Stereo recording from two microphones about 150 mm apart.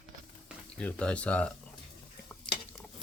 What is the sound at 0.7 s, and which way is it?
Speech, 5° left (ahead or behind).